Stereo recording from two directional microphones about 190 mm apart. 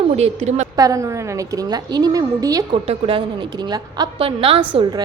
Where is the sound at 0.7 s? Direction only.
20° right (ahead or behind).